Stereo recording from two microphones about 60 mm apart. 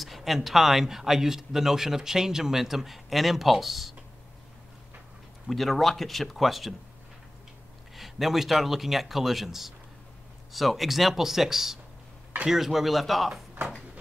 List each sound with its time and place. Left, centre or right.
0.0 s speech: centre
5.5 s speech: centre
7.9 s speech: centre